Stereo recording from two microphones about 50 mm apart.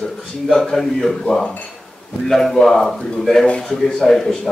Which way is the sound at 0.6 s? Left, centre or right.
Centre.